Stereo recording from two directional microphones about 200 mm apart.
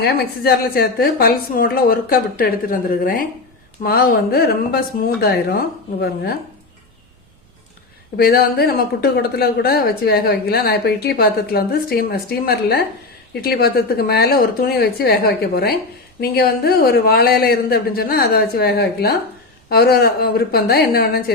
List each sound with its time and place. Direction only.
0.0 s a woman's voice: 50° left (ahead or behind)
8.1 s a woman's voice: 50° left (ahead or behind)